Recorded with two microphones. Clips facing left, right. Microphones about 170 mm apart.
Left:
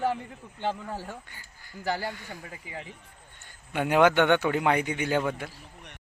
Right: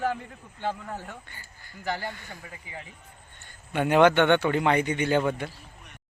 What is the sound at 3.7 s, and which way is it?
A man's voice, 10° left (ahead or behind).